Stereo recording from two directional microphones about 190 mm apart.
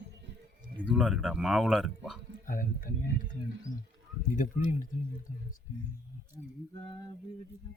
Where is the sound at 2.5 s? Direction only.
50° left (ahead or behind).